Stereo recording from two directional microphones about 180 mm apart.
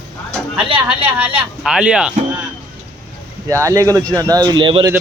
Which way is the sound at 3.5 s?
15° right (ahead or behind).